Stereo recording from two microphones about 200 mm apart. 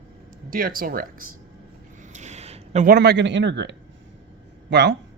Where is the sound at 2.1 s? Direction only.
35° right (ahead or behind).